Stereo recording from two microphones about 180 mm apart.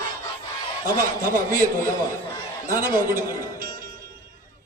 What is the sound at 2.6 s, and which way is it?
A man's voice, 50° right (ahead or behind).